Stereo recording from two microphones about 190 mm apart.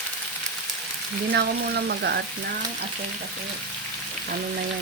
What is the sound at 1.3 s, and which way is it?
Speech, 60° right (ahead or behind).